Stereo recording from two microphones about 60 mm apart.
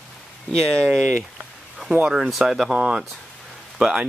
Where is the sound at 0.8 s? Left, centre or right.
Centre.